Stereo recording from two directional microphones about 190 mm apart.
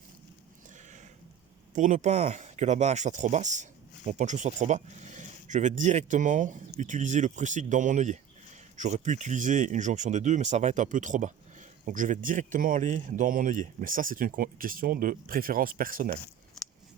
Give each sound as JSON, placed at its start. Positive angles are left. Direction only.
{"t": 1.7, "sound": "speech", "side_deg": -40}